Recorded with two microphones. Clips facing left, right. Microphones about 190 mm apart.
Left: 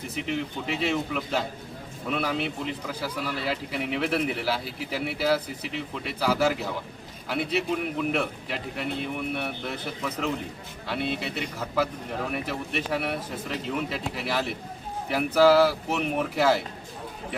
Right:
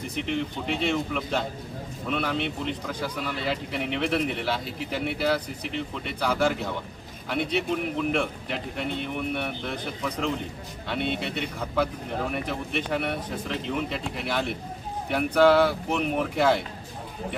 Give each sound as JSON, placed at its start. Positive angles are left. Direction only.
{"t": 0.1, "sound": "a man's voice", "side_deg": 5}